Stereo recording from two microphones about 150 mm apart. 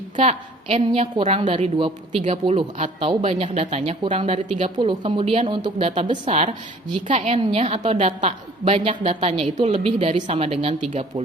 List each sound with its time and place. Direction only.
0.2 s speech: 45° right (ahead or behind)
3.0 s speech: 40° right (ahead or behind)
6.2 s speech: 50° right (ahead or behind)